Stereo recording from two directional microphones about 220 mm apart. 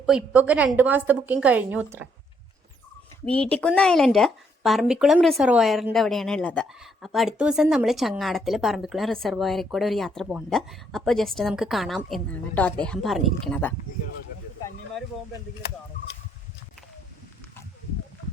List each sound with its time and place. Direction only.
0.0 s a woman's voice: 5° right (ahead or behind)
3.2 s speech: 5° left (ahead or behind)